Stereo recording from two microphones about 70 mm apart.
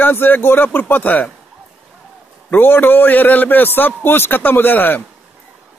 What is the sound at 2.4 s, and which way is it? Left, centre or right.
A man's voice, left.